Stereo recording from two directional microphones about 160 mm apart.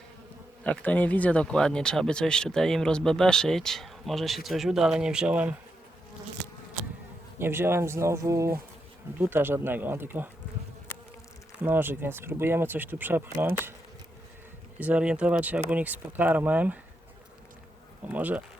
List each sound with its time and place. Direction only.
0.6 s speech: 10° left (ahead or behind); by 5.5 s 10° right (ahead or behind)
7.3 s speech: 15° right (ahead or behind)
11.6 s speech: 15° right (ahead or behind)
14.8 s speech: 10° right (ahead or behind)
18.0 s speech: 10° right (ahead or behind)